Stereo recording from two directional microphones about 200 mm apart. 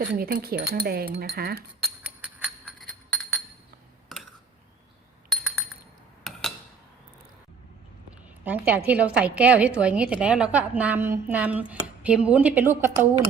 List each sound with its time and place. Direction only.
0.2 s speech: 50° right (ahead or behind)
1.8 s music: 5° right (ahead or behind)
5.3 s a sound: centre (ahead or behind)
8.4 s a woman's voice: 10° right (ahead or behind)